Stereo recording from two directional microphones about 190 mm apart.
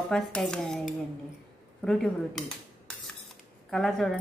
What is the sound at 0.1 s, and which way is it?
Speech, 5° left (ahead or behind).